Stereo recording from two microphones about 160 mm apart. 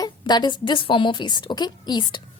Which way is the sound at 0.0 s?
25° left (ahead or behind).